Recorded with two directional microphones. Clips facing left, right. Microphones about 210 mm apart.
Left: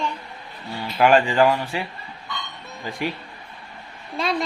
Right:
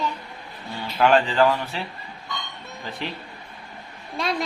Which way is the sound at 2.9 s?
10° left (ahead or behind).